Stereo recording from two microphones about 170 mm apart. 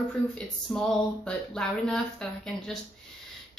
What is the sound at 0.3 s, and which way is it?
Speech, 5° left (ahead or behind).